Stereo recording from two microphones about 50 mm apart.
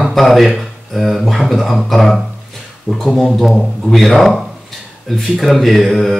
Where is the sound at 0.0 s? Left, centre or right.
Centre.